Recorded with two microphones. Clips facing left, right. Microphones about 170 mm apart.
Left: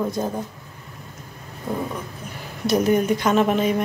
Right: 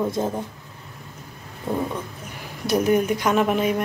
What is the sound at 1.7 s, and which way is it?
A woman's voice, centre (ahead or behind).